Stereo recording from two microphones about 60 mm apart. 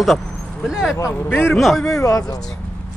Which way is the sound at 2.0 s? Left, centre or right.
Left.